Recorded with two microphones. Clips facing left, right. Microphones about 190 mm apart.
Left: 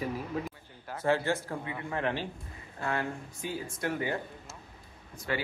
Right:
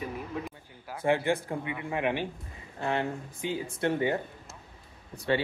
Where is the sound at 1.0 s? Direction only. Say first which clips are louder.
Right 2 dB; 15° right (ahead or behind).